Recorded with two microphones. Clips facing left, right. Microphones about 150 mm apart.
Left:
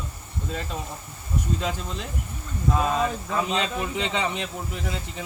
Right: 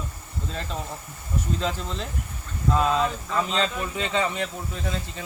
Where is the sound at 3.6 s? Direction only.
20° left (ahead or behind).